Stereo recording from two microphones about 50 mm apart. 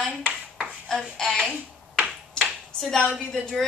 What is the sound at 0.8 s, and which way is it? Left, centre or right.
Speech, centre.